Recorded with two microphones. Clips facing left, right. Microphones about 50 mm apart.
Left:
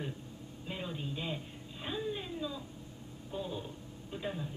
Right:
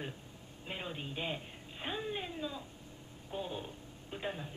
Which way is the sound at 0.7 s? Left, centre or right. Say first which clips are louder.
Left 1 dB; right.